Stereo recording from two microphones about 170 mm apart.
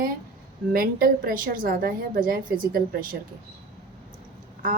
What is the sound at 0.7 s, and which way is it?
A woman's voice, 60° right (ahead or behind).